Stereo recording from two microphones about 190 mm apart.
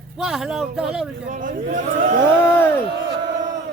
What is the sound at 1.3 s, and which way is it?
Speech, 45° right (ahead or behind).